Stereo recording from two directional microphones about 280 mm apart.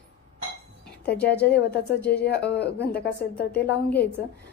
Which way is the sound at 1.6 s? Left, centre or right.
Left.